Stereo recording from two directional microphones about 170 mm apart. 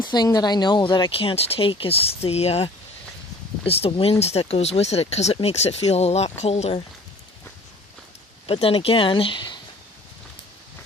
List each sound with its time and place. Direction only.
0.0 s speech: 25° left (ahead or behind)
3.7 s speech: 35° left (ahead or behind)
8.4 s speech: 35° left (ahead or behind)